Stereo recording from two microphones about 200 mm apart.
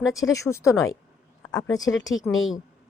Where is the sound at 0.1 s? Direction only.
15° left (ahead or behind).